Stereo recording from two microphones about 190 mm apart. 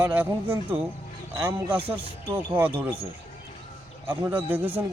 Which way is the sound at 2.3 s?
10° right (ahead or behind).